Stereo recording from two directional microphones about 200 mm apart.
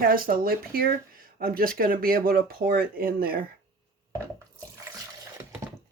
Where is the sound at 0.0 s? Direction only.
45° right (ahead or behind).